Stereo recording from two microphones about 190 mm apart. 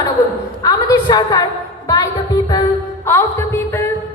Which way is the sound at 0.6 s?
20° left (ahead or behind).